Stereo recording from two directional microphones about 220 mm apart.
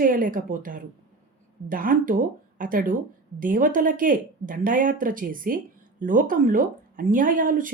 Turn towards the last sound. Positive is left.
turn(degrees=-40)  # may be behind; listen again after turning